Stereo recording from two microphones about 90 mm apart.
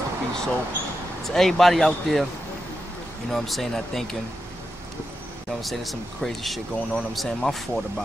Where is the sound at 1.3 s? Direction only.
Centre (ahead or behind).